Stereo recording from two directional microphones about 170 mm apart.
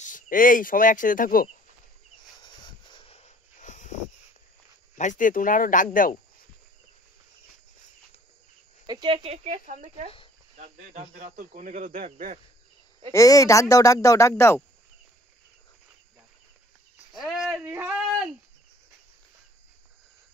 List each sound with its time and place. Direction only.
0.0 s speech: 50° left (ahead or behind)
2.9 s a sound: 35° left (ahead or behind)
4.9 s speech: 45° left (ahead or behind)
8.8 s speech: 25° right (ahead or behind); by 10.0 s 40° right (ahead or behind)
10.6 s cricket: 45° right (ahead or behind)
13.1 s speech: 20° left (ahead or behind)
17.1 s speech: centre (ahead or behind)
17.6 s a man's voice: 10° right (ahead or behind)